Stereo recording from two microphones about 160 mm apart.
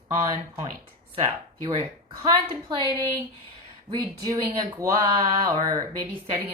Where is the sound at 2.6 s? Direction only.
25° right (ahead or behind).